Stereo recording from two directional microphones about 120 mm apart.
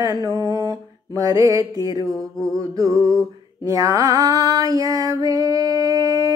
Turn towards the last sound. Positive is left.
turn(degrees=-30)  # may be behind; listen again after turning